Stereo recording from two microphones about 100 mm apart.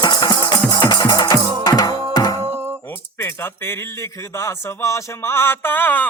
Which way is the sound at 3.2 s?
25° left (ahead or behind).